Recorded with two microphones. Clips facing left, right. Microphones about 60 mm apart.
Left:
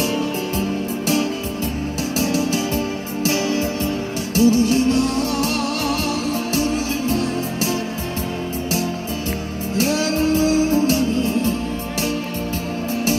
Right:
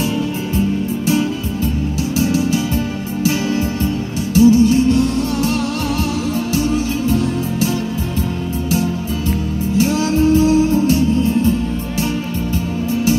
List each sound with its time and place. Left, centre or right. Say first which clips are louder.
4.4 s music: right 5 dB; left
7.1 s music: right 3 dB; left
9.8 s music: right 3 dB; left